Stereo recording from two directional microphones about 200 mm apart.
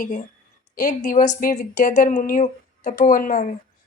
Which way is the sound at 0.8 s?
40° left (ahead or behind).